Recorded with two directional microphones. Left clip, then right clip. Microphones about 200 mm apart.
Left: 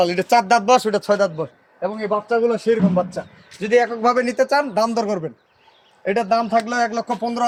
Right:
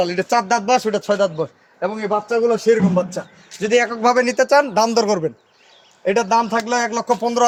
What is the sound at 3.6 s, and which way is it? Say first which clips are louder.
A man's voice: right 1 dB; 30° right (ahead or behind).